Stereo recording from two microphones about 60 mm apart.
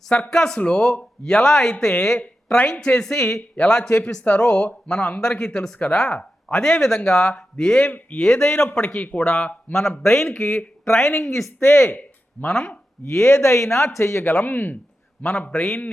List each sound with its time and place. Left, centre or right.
0.3 s a man's voice: centre
5.4 s speech: centre
10.0 s speech: left
13.1 s speech: left
15.2 s speech: centre